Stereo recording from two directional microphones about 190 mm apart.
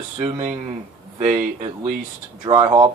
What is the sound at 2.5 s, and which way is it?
Speech, 25° right (ahead or behind).